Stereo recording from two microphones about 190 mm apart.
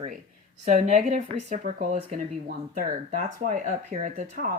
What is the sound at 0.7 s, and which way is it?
Speech, 40° right (ahead or behind).